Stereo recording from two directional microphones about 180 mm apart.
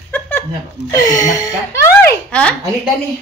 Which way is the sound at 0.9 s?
20° left (ahead or behind).